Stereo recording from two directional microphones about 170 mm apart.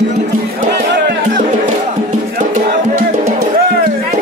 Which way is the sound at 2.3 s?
50° right (ahead or behind).